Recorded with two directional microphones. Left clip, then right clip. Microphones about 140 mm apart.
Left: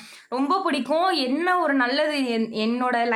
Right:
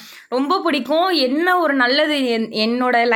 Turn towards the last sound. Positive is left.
turn(degrees=-30)  # may be behind; listen again after turning